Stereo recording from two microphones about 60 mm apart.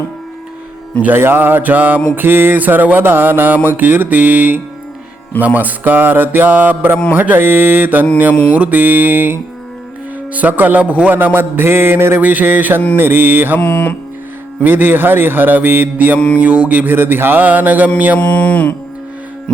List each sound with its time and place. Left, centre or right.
1.0 s mantra: right
8.3 s speech: left
8.5 s mantra: right
12.2 s mantra: right
13.6 s speech: left
14.6 s mantra: right
16.1 s speech: centre
16.4 s mantra: right
18.2 s speech: left